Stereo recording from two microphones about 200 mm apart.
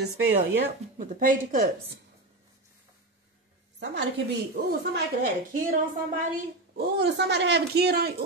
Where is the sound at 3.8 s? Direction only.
65° right (ahead or behind).